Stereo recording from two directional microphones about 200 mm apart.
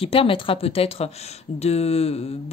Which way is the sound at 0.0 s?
25° left (ahead or behind).